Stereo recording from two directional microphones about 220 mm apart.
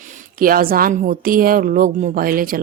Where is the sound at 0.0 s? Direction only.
35° right (ahead or behind).